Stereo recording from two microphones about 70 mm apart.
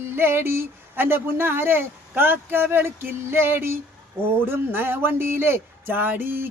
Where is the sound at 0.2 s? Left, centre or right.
Right.